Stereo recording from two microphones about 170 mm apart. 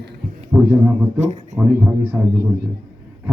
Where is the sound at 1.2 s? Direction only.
45° right (ahead or behind).